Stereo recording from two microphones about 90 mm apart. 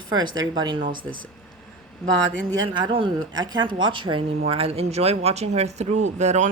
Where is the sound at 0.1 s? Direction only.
50° right (ahead or behind).